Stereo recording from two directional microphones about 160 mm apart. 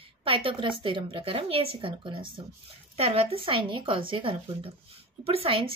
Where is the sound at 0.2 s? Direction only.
35° right (ahead or behind).